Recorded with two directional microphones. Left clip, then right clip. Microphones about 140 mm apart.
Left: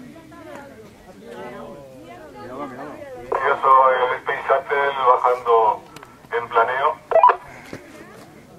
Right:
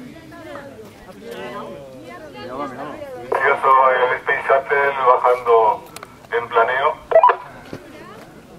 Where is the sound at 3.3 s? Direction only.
Centre (ahead or behind).